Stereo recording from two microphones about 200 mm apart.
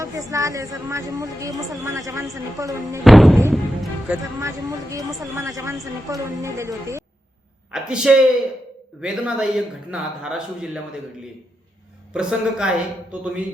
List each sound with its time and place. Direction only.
0.0 s a woman's voice: 15° right (ahead or behind)
3.0 s a man's voice: centre (ahead or behind)
4.1 s a woman's voice: 15° right (ahead or behind)
7.7 s a man's voice: 5° right (ahead or behind)
12.1 s a man's voice: 5° right (ahead or behind)